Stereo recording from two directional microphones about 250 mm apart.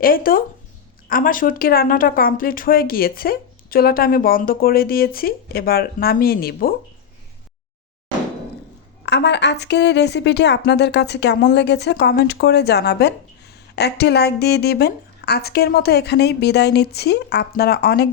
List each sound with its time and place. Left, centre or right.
0.0 s speech: left
9.0 s a woman's voice: left